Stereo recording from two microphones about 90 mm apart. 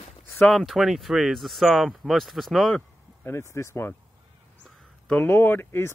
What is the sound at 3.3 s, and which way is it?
Speech, 30° left (ahead or behind).